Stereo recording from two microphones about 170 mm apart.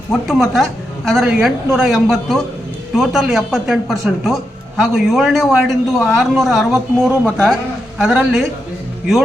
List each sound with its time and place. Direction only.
0.1 s a man's voice: centre (ahead or behind)